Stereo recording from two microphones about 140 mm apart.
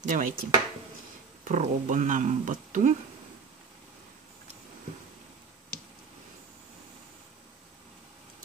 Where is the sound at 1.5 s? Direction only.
65° right (ahead or behind).